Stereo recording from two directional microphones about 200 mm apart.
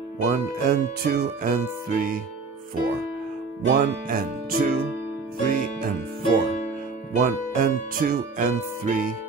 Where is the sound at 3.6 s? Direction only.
45° right (ahead or behind).